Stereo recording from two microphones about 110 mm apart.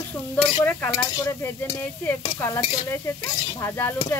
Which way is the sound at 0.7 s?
20° left (ahead or behind).